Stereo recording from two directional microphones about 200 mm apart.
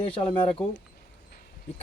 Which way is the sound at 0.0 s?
25° left (ahead or behind).